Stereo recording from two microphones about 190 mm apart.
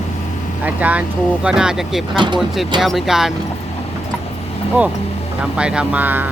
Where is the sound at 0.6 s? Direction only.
10° right (ahead or behind).